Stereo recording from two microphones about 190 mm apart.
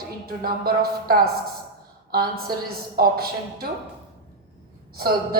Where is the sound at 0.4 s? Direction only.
50° right (ahead or behind).